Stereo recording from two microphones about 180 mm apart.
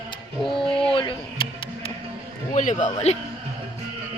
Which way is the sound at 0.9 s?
30° left (ahead or behind).